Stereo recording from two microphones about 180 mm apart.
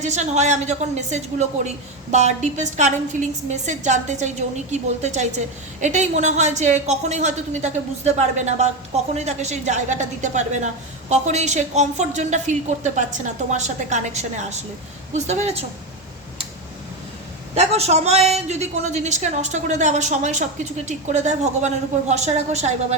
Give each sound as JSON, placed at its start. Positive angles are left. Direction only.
{"t": 0.0, "sound": "a woman's voice", "side_deg": -40}
{"t": 17.5, "sound": "a woman's voice", "side_deg": -35}